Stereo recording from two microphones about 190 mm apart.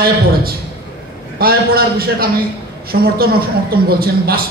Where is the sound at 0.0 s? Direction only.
55° right (ahead or behind).